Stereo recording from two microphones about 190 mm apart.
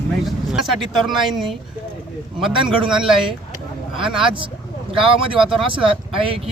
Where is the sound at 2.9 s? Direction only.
5° right (ahead or behind).